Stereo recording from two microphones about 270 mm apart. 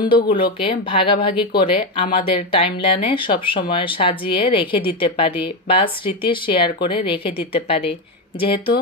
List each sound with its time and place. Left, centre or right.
0.0 s speech: centre